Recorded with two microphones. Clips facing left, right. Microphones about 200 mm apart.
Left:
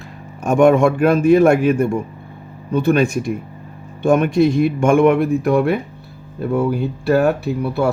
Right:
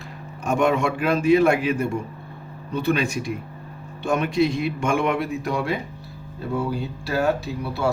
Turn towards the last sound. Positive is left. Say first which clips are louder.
# left 6 dB
turn(degrees=55)  # may be behind; listen again after turning